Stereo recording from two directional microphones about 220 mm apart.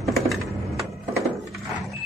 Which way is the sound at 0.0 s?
Centre (ahead or behind).